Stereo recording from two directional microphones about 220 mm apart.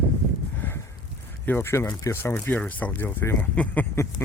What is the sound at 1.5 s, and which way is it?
Speech, 10° left (ahead or behind).